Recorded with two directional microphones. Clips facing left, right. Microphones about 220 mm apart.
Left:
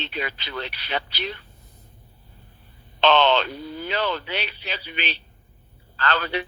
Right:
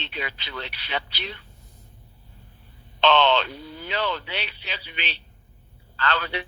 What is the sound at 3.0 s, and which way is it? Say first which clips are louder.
Speech: left 1 dB; 45° left (ahead or behind).